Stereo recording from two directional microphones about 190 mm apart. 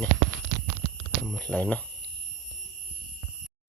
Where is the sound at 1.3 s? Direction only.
5° left (ahead or behind).